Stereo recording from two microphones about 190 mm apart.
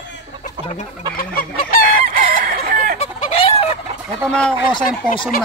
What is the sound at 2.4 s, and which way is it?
Chicken, 50° right (ahead or behind).